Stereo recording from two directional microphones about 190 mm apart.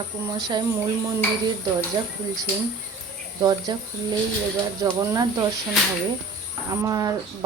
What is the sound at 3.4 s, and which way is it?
Speech, 20° right (ahead or behind).